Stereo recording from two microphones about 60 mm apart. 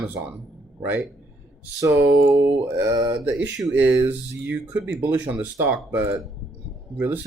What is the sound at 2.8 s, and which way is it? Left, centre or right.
Speech, right.